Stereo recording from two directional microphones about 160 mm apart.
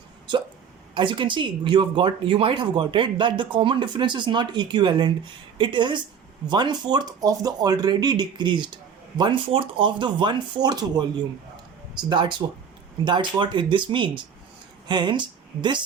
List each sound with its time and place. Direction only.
0.9 s speech: 30° right (ahead or behind)
12.0 s speech: 30° right (ahead or behind)